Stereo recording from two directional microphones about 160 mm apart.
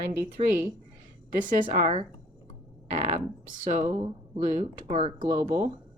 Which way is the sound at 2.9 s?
40° right (ahead or behind).